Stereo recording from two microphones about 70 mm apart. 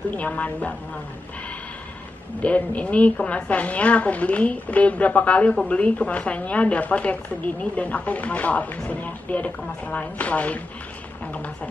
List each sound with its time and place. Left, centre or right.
0.1 s a woman's voice: left
2.4 s a woman's voice: centre